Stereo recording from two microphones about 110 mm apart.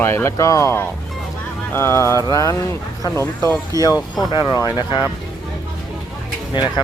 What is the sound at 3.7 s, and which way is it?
Speech, 30° right (ahead or behind).